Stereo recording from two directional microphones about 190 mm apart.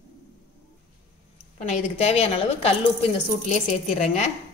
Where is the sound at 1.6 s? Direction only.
40° left (ahead or behind).